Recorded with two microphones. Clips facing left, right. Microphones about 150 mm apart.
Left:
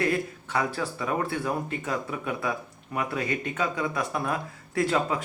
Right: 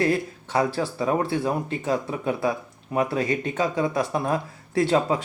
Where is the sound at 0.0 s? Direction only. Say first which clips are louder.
Right 4 dB; 30° right (ahead or behind).